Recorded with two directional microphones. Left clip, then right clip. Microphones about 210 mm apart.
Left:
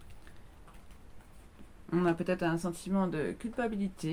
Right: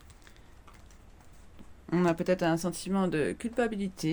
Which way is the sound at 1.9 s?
55° right (ahead or behind).